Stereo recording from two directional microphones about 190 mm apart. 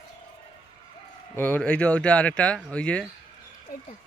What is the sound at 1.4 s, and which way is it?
A man's voice, 10° left (ahead or behind).